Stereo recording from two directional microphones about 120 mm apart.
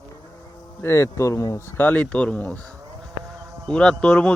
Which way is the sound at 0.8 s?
25° left (ahead or behind).